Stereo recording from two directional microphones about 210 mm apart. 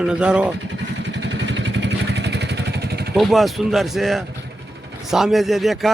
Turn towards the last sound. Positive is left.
turn(degrees=0)  # may be behind; listen again after turning